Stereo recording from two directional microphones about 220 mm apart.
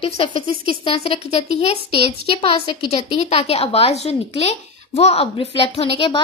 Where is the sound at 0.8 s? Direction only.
25° left (ahead or behind).